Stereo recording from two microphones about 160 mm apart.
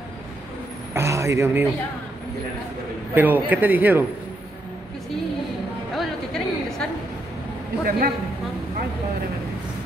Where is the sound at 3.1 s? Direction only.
10° right (ahead or behind).